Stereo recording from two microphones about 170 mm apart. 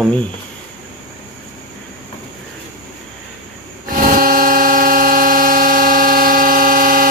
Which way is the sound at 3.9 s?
55° right (ahead or behind).